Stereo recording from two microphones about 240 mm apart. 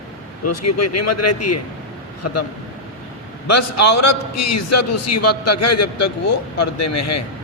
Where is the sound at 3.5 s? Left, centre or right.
Left.